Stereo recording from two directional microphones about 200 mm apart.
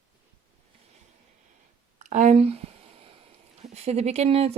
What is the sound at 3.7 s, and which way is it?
Speech, 35° right (ahead or behind).